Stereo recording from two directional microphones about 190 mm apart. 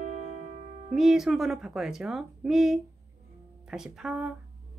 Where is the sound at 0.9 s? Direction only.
Centre (ahead or behind).